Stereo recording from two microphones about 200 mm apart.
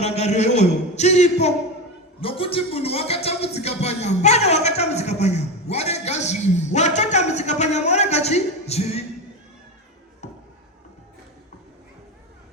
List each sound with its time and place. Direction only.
0.0 s a man's voice: 30° left (ahead or behind)